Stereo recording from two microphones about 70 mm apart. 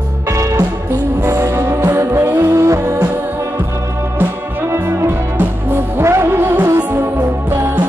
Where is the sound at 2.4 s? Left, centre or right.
Right.